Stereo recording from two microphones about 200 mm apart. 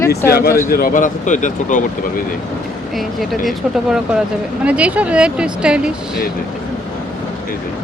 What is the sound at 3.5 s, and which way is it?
Speech, 5° right (ahead or behind).